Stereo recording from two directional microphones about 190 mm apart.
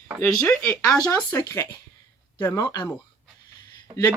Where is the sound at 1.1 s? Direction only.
15° left (ahead or behind).